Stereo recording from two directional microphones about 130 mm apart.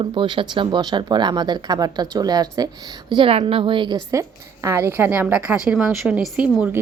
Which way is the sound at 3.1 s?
45° right (ahead or behind).